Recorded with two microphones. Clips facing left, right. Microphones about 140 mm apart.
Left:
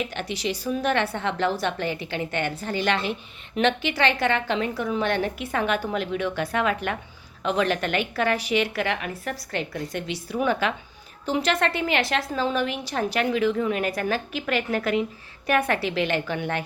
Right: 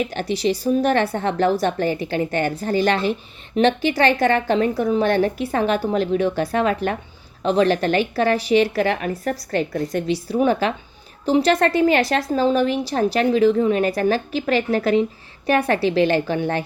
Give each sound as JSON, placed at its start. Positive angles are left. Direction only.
{"t": 0.0, "sound": "a woman's voice", "side_deg": -35}